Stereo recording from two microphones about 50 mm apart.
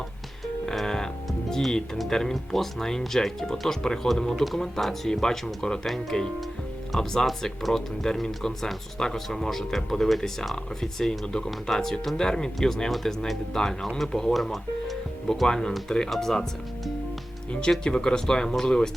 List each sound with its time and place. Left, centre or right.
0.6 s speech: centre
11.3 s speech: centre
14.3 s speech: centre
15.4 s speech: centre